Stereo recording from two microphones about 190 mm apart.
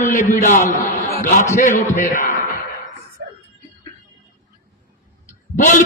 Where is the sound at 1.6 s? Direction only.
45° left (ahead or behind).